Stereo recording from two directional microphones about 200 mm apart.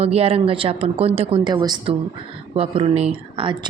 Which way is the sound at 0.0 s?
30° right (ahead or behind).